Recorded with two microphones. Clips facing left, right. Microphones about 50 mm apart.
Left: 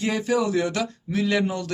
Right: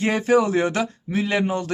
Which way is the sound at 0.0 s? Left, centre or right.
Right.